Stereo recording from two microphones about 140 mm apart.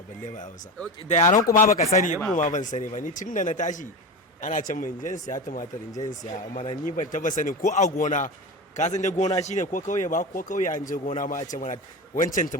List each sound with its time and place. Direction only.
1.0 s a man's voice: 55° left (ahead or behind)
7.9 s a man's voice: 70° left (ahead or behind)